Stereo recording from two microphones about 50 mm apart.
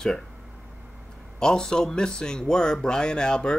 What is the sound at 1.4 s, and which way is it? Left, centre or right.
Speech, centre.